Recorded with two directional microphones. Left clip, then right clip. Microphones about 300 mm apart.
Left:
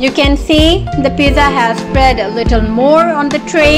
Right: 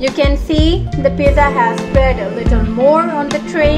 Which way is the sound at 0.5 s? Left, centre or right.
Centre.